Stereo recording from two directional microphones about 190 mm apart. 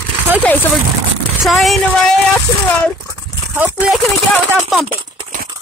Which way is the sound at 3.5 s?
5° right (ahead or behind).